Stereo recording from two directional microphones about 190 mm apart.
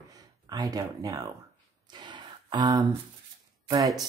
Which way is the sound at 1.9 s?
25° right (ahead or behind).